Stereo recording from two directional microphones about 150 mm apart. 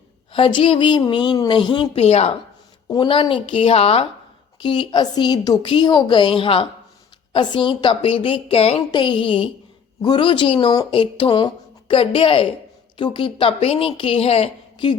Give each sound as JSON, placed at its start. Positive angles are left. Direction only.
{"t": 0.3, "sound": "speech", "side_deg": 35}
{"t": 2.0, "sound": "speech", "side_deg": 45}
{"t": 2.9, "sound": "speech", "side_deg": 35}